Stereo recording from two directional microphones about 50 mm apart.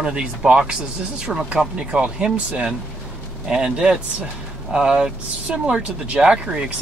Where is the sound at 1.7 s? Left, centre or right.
Right.